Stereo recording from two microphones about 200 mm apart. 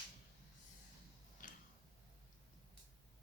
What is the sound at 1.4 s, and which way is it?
Tick-tock, 40° left (ahead or behind).